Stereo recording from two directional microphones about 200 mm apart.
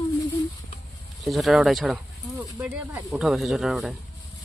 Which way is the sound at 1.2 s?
Centre (ahead or behind).